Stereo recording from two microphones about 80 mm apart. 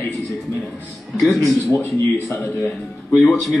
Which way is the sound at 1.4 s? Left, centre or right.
Left.